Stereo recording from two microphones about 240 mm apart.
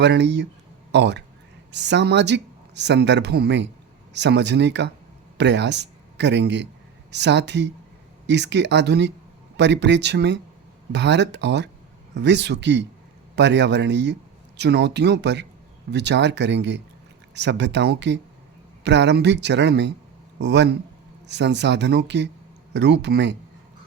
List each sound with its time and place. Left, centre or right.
0.0 s a man's voice: right